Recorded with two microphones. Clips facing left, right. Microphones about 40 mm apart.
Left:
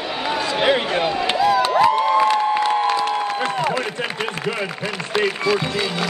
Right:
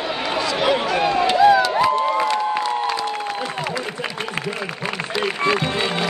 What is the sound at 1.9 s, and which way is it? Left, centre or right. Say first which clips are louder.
Crowd: left 3 dB; left.